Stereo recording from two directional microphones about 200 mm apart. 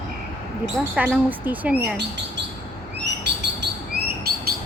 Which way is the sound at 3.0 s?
60° right (ahead or behind).